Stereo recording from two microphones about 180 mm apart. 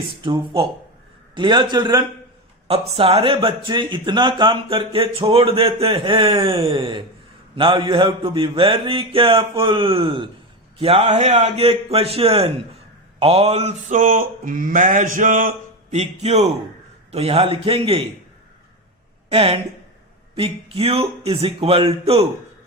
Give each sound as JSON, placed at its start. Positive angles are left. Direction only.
{"t": 0.3, "sound": "mantra", "side_deg": -30}
{"t": 2.6, "sound": "speech", "side_deg": -30}
{"t": 7.5, "sound": "mantra", "side_deg": -30}
{"t": 10.8, "sound": "speech", "side_deg": -35}
{"t": 13.1, "sound": "mantra", "side_deg": -35}
{"t": 17.1, "sound": "speech", "side_deg": -35}
{"t": 19.3, "sound": "speech", "side_deg": -30}